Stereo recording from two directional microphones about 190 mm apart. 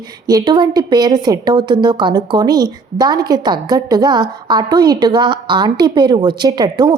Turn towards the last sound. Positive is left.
turn(degrees=-25)  # may be behind; listen again after turning